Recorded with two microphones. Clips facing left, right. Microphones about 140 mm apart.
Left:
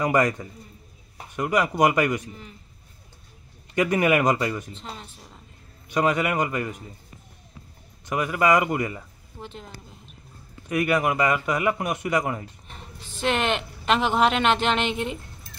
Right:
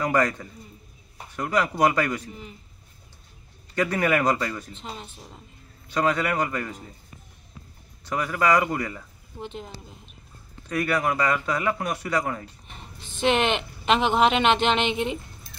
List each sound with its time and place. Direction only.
0.0 s speech: 15° left (ahead or behind)
3.7 s speech: 15° left (ahead or behind)
5.9 s speech: 15° left (ahead or behind)
8.0 s a man's voice: 15° left (ahead or behind)
9.4 s speech: centre (ahead or behind)
10.7 s a man's voice: 20° left (ahead or behind)
13.2 s speech: centre (ahead or behind)